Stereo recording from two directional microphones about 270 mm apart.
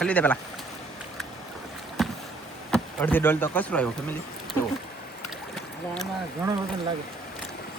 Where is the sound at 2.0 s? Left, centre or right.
Centre.